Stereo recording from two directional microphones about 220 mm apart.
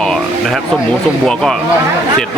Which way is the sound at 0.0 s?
Centre (ahead or behind).